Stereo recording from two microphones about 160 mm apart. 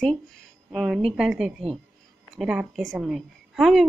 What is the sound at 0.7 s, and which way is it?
A woman's voice, centre (ahead or behind).